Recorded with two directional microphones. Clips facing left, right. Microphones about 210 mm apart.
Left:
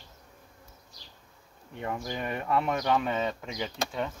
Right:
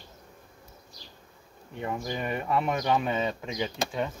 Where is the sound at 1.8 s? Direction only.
10° right (ahead or behind).